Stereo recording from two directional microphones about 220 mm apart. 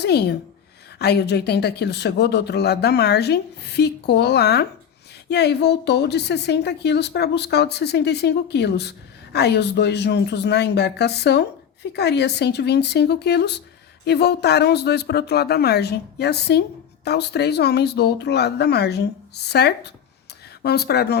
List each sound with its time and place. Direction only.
0.0 s a woman's voice: 50° left (ahead or behind)